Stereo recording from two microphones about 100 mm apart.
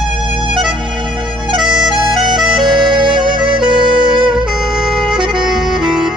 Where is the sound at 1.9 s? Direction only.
50° right (ahead or behind).